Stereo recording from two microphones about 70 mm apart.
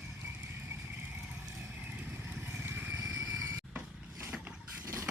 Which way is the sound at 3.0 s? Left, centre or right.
Right.